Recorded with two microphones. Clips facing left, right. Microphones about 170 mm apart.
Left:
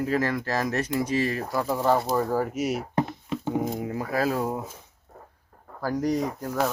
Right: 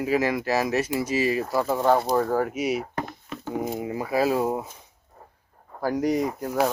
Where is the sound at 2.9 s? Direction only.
25° left (ahead or behind).